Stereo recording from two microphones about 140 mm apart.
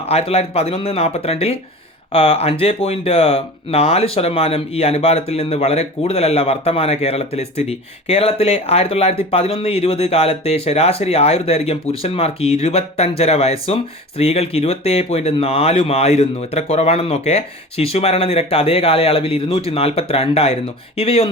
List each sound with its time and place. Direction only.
0.0 s speech: 45° left (ahead or behind)